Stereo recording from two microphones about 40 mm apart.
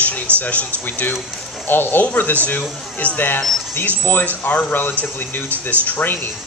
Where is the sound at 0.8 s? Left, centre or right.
Left.